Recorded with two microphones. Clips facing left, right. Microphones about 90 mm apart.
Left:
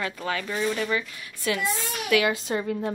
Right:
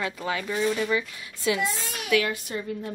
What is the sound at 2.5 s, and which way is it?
Speech, 80° left.